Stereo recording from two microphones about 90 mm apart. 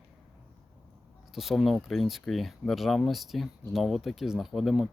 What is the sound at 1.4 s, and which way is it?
Speech, centre (ahead or behind).